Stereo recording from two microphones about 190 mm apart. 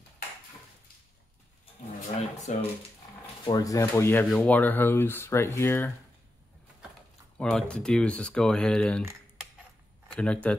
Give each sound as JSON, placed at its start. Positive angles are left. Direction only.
{"t": 2.5, "sound": "speech", "side_deg": 40}
{"t": 3.4, "sound": "speech", "side_deg": 20}
{"t": 7.3, "sound": "speech", "side_deg": 5}
{"t": 10.1, "sound": "speech", "side_deg": 5}